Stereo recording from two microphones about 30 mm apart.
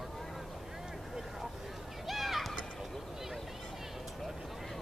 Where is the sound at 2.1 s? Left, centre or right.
Centre.